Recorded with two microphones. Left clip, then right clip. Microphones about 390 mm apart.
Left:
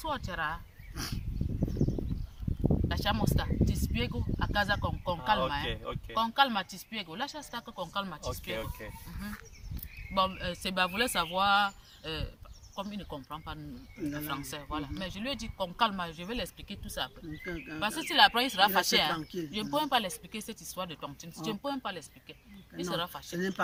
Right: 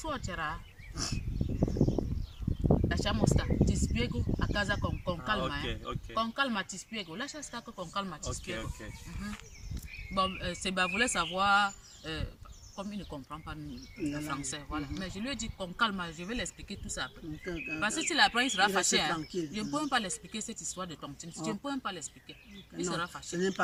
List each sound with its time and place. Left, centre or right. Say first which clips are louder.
0.0 s speech: left 2 dB; centre
1.6 s a sound: right 4 dB; right
2.9 s speech: even; centre
10.2 s speech: left 2 dB; centre